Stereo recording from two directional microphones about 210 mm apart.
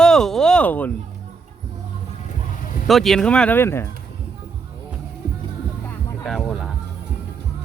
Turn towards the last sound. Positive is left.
turn(degrees=0)  # may be behind; listen again after turning